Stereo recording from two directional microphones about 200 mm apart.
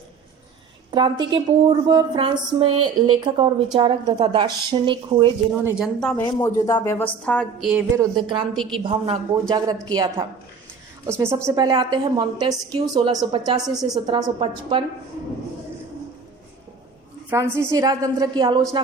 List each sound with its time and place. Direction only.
0.9 s a woman's voice: 20° right (ahead or behind)
5.6 s a woman's voice: 5° right (ahead or behind)
6.2 s speech: 20° left (ahead or behind)
7.7 s a woman's voice: 10° right (ahead or behind)
8.1 s a woman's voice: 25° right (ahead or behind)
17.2 s a woman's voice: 10° right (ahead or behind)